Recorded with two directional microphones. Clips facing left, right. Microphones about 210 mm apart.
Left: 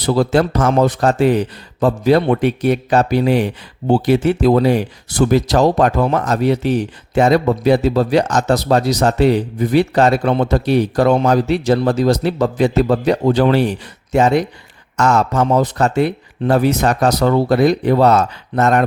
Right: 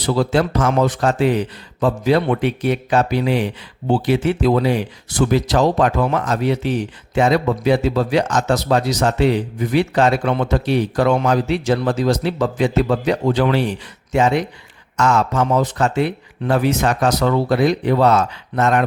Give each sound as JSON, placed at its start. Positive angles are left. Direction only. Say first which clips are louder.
{"t": 0.0, "sound": "speech", "louder": "left 3 dB", "side_deg": 40}